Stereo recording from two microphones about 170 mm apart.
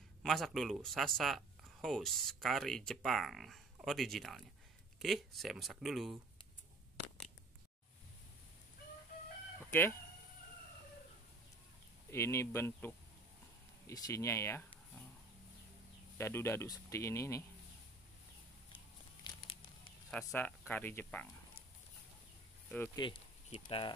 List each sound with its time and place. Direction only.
0.2 s speech: centre (ahead or behind)
9.7 s speech: 15° left (ahead or behind)
12.1 s speech: 15° left (ahead or behind)
16.2 s speech: 15° left (ahead or behind)
19.2 s crumpling: 30° left (ahead or behind)
20.1 s speech: 5° left (ahead or behind)
22.9 s speech: 30° left (ahead or behind)